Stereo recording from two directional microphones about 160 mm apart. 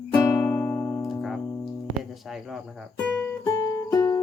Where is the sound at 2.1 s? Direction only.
Centre (ahead or behind).